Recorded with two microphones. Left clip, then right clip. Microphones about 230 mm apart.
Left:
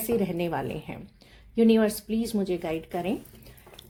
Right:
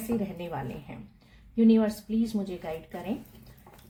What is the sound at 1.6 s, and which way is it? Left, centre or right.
Speech, left.